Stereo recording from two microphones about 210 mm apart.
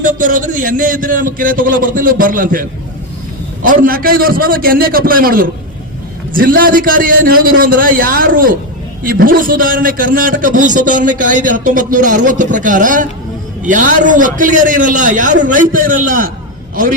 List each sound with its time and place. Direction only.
0.0 s a man's voice: 40° right (ahead or behind)
3.7 s a man's voice: 45° right (ahead or behind)